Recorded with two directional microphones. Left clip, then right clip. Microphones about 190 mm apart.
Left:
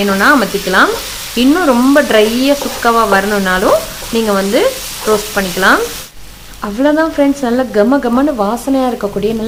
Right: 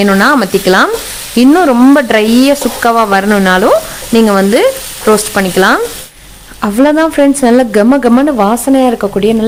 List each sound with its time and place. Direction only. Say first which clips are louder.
0.0 s stir: right 2 dB; 50° right (ahead or behind)
6.6 s speech: right 4 dB; 45° right (ahead or behind)